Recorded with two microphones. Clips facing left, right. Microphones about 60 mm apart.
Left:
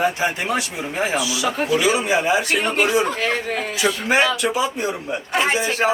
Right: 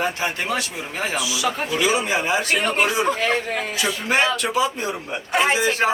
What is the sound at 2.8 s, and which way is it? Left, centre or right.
Speech, centre.